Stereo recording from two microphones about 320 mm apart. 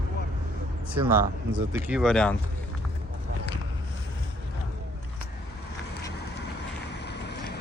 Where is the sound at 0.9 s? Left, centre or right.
Centre.